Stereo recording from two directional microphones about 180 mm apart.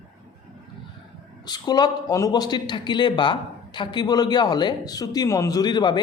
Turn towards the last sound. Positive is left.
turn(degrees=25)  # may be behind; listen again after turning